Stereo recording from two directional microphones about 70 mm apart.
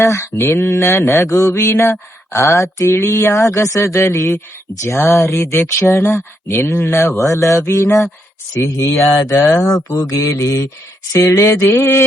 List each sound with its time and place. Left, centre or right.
0.0 s speech: left
9.6 s speech: left
10.0 s speech: left